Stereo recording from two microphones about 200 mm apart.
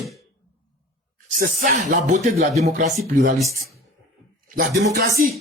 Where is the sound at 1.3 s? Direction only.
40° right (ahead or behind).